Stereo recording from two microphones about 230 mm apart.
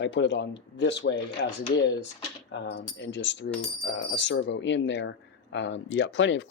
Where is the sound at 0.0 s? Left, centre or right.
Left.